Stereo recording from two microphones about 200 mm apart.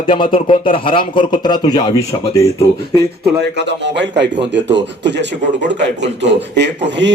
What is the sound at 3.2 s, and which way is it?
A man's voice, 60° right (ahead or behind).